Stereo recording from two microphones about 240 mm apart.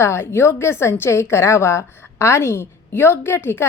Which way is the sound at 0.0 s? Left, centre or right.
Centre.